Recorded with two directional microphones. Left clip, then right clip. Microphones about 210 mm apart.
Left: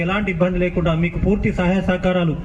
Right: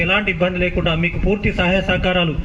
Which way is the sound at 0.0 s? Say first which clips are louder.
Right 3 dB; 45° left (ahead or behind).